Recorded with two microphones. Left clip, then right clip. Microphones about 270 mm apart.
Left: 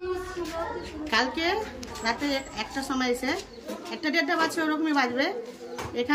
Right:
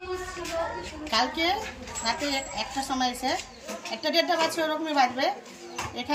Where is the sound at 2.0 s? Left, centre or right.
Centre.